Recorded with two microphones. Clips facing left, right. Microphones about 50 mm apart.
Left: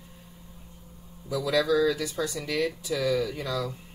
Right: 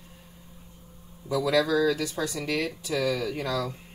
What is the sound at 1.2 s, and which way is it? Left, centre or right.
Speech, right.